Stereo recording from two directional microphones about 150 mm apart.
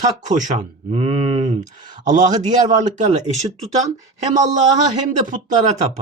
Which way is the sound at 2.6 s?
55° right (ahead or behind).